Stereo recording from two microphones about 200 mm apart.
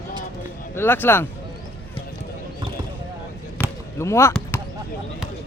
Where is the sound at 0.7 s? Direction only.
10° left (ahead or behind).